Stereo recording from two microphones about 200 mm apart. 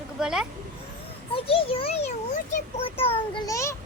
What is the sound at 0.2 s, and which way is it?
Speech, 5° right (ahead or behind).